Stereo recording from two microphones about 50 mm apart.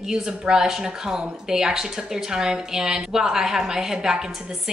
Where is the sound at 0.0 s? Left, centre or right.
Centre.